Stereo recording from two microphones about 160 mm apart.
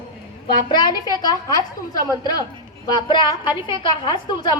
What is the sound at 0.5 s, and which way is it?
A woman's voice, 25° left (ahead or behind).